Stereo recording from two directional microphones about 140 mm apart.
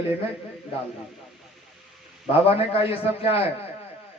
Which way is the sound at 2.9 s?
45° left (ahead or behind).